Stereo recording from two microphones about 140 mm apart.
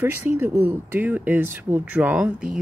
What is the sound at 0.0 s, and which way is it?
Speech, 15° right (ahead or behind).